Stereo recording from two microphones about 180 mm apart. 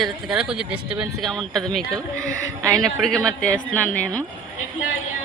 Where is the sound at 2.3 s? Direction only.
15° right (ahead or behind).